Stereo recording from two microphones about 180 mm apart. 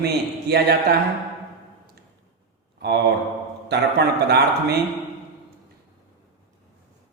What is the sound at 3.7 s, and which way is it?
A man's voice, 65° right (ahead or behind).